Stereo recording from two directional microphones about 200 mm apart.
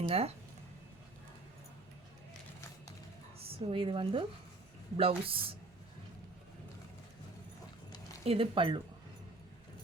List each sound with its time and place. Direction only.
0.1 s speech: 30° right (ahead or behind)
3.3 s a woman's voice: 30° right (ahead or behind)
8.2 s speech: 30° right (ahead or behind)